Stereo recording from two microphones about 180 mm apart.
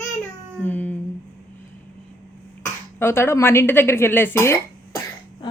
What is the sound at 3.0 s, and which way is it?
Speech, 15° left (ahead or behind).